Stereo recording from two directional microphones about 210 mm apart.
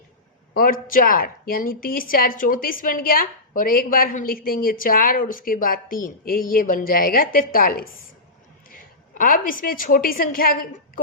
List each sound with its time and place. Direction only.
0.5 s a woman's voice: 40° left (ahead or behind)